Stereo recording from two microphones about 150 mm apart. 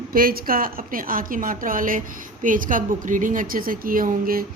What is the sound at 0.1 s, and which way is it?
A woman's voice, 75° right (ahead or behind).